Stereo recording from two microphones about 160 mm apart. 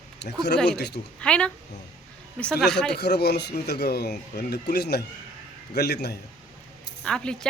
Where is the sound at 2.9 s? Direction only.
90° left.